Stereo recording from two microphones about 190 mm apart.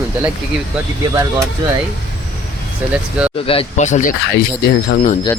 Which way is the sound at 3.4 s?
35° left (ahead or behind).